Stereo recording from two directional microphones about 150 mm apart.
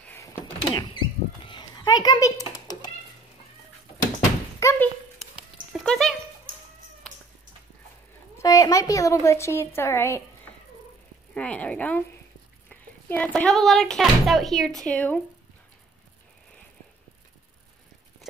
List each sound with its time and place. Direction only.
0.0 s power windows: 15° left (ahead or behind)
0.7 s rodents: 35° left (ahead or behind)
4.6 s thunk: 20° left (ahead or behind)
5.2 s a sound: centre (ahead or behind)
7.0 s cat: 5° left (ahead or behind)
8.4 s a woman's voice: 20° left (ahead or behind)
11.3 s speech: 10° left (ahead or behind)